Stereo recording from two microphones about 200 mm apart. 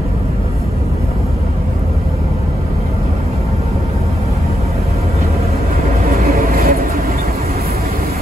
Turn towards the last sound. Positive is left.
turn(degrees=-50)  # may be behind; listen again after turning